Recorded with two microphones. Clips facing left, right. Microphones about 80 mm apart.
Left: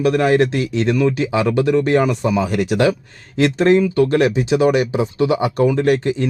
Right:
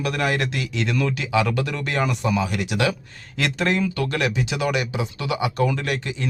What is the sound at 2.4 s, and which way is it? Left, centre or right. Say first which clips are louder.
Speech: left 7 dB; left.